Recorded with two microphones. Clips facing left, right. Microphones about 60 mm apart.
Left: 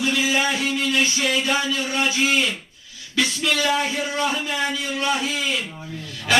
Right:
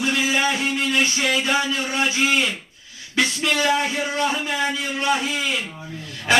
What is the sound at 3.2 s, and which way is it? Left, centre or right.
Speech, right.